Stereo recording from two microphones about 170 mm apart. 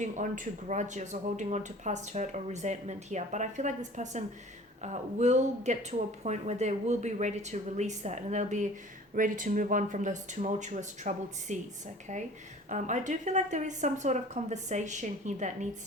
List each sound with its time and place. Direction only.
0.0 s speech: 50° right (ahead or behind)